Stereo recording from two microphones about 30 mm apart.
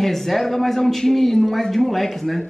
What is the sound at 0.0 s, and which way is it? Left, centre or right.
Speech, centre.